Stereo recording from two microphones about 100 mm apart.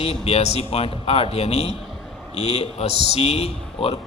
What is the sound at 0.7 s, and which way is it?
A man's voice, 80° left.